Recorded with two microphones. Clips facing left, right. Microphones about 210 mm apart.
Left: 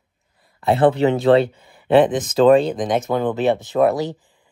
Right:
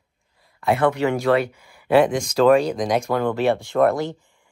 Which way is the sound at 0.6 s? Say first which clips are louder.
Left 4 dB; 25° left (ahead or behind).